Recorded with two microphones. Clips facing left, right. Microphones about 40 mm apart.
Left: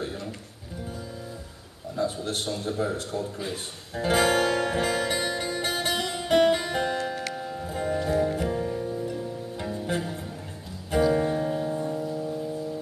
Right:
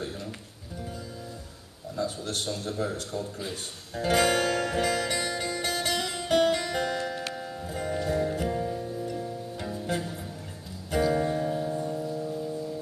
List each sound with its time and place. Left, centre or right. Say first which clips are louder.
0.0 s music: left 3 dB; centre
2.0 s a sound: left 3 dB; left
7.3 s music: left 3 dB; centre